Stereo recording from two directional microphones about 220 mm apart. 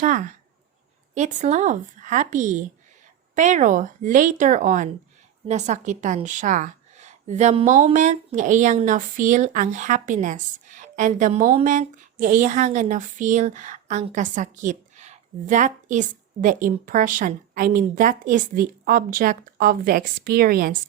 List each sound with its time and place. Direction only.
0.0 s a woman's voice: 35° right (ahead or behind)